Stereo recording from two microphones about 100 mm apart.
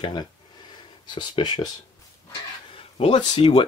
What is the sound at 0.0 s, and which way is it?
Speech, 50° left (ahead or behind).